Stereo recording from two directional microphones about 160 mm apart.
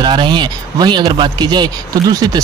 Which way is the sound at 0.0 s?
30° right (ahead or behind).